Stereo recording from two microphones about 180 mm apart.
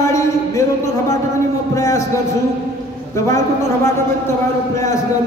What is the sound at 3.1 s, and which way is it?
A man's voice, 15° left (ahead or behind).